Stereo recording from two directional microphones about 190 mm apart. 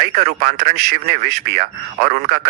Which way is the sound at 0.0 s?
50° right (ahead or behind).